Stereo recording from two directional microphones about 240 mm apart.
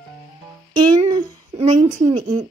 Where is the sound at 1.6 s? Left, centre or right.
Right.